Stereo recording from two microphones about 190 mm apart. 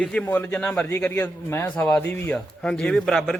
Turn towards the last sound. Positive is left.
turn(degrees=0)  # may be behind; listen again after turning